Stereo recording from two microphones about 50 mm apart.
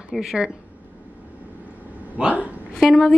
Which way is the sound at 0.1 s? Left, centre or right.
Centre.